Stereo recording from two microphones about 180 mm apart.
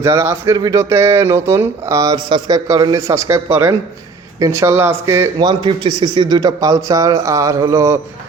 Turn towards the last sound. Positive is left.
turn(degrees=-15)  # may be behind; listen again after turning